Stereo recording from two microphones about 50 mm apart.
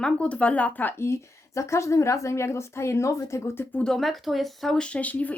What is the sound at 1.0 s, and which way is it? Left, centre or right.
A woman's voice, left.